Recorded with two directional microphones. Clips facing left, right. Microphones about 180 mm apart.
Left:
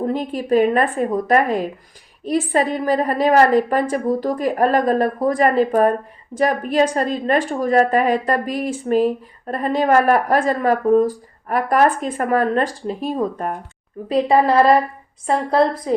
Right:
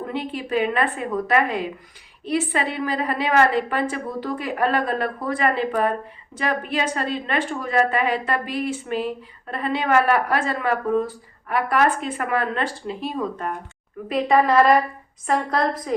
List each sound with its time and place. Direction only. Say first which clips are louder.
0.0 s a woman's voice: left 6 dB; 40° left (ahead or behind)